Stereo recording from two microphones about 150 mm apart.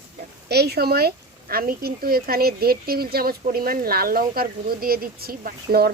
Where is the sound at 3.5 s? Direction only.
80° right.